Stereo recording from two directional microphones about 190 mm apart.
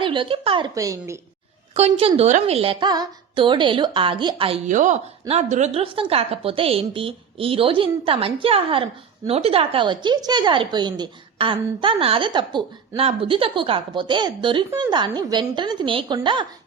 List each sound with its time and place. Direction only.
0.0 s a woman's voice: 25° right (ahead or behind)
1.7 s a woman's voice: 30° right (ahead or behind)
4.7 s a woman's voice: 40° right (ahead or behind); by 16.5 s 25° right (ahead or behind)